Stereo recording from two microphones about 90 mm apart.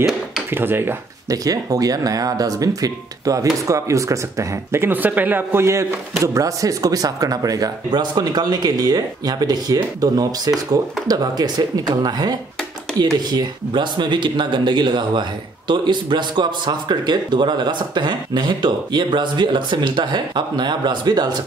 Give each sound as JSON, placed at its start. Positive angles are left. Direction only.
{"t": 0.5, "sound": "speech", "side_deg": -25}
{"t": 1.3, "sound": "speech", "side_deg": -40}
{"t": 4.8, "sound": "speech", "side_deg": -20}